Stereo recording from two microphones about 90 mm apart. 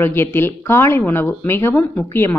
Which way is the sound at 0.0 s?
25° left (ahead or behind).